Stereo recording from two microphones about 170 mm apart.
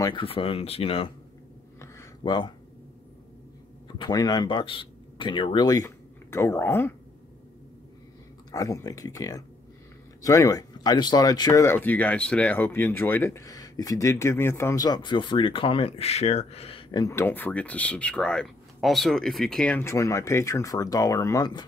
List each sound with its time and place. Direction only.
0.0 s speech: 30° left (ahead or behind)
1.8 s a sound: 20° left (ahead or behind)
3.8 s speech: 25° left (ahead or behind)
8.5 s speech: 20° left (ahead or behind)
17.0 s speech: 15° left (ahead or behind)